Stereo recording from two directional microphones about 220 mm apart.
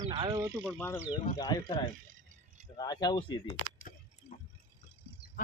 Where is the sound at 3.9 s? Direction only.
40° left (ahead or behind).